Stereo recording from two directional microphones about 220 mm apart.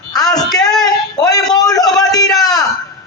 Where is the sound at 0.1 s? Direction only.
15° left (ahead or behind).